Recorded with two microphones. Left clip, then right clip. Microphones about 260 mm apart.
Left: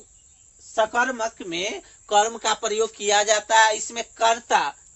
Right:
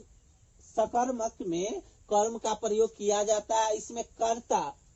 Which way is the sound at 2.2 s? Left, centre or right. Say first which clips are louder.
Left 6 dB; left.